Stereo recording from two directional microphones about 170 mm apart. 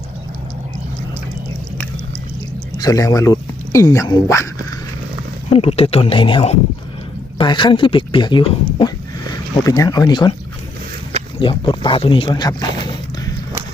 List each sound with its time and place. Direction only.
2.7 s speech: 20° left (ahead or behind)
5.5 s speech: 35° left (ahead or behind)
11.3 s speech: 30° left (ahead or behind)